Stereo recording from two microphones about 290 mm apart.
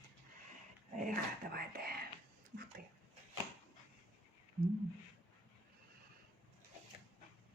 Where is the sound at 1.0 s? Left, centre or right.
Right.